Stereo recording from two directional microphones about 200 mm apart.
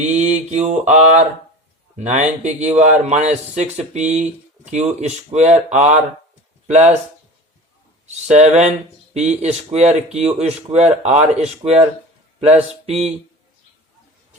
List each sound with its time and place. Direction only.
0.0 s mantra: 35° right (ahead or behind)
0.5 s speech: 35° right (ahead or behind)
8.3 s speech: 35° right (ahead or behind)
12.8 s mantra: 30° right (ahead or behind)